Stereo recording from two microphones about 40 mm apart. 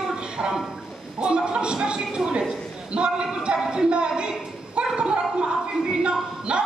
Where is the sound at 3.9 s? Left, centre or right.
Right.